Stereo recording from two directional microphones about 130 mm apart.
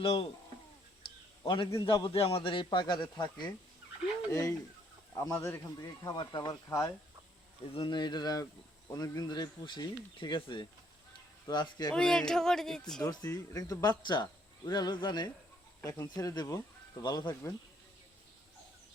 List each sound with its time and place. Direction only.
0.0 s speech: 45° left (ahead or behind)
1.0 s a sound: 35° left (ahead or behind)
1.8 s speech: 40° left (ahead or behind)
4.3 s speech: 25° left (ahead or behind)
5.7 s speech: 30° left (ahead or behind)
7.7 s speech: 40° left (ahead or behind)
11.9 s a sound: 5° left (ahead or behind)
13.0 s speech: 25° left (ahead or behind)